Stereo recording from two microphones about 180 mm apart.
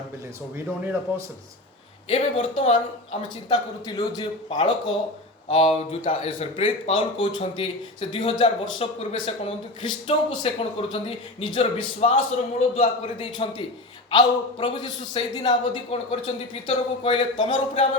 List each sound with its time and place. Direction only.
0.5 s speech: 15° right (ahead or behind)
2.0 s a man's voice: 30° left (ahead or behind)